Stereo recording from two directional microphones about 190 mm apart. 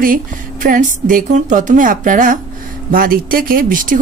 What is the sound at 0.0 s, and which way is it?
Speech, 45° right (ahead or behind).